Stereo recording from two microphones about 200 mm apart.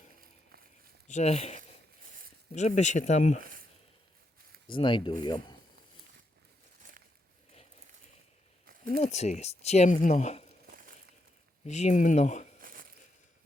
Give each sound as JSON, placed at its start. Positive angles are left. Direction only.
{"t": 1.0, "sound": "speech", "side_deg": 35}
{"t": 4.7, "sound": "speech", "side_deg": 25}
{"t": 8.6, "sound": "a sound", "side_deg": -45}
{"t": 9.0, "sound": "speech", "side_deg": 35}
{"t": 11.6, "sound": "speech", "side_deg": 35}
{"t": 12.6, "sound": "a sound", "side_deg": -45}